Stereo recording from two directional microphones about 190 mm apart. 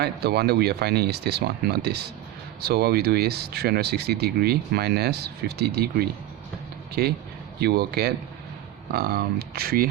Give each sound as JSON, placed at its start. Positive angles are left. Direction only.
{"t": 0.0, "sound": "speech", "side_deg": -60}
{"t": 7.6, "sound": "speech", "side_deg": -55}